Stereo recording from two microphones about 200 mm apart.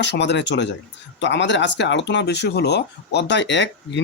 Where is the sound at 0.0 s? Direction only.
60° left (ahead or behind).